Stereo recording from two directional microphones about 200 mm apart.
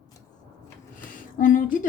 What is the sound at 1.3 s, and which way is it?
Speech, 40° left (ahead or behind).